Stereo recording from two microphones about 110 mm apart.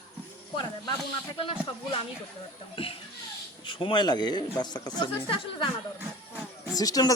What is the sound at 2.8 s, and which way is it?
Speech, 55° left (ahead or behind).